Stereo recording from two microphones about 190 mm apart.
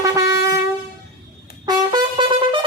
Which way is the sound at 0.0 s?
15° right (ahead or behind).